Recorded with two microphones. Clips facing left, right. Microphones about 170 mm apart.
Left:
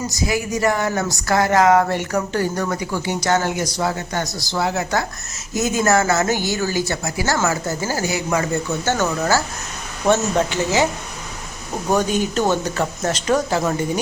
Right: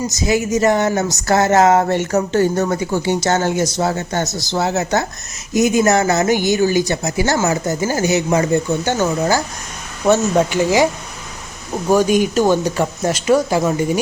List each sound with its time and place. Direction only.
0.1 s speech: 20° right (ahead or behind)
10.1 s speech: 10° right (ahead or behind)
11.9 s speech: 10° right (ahead or behind)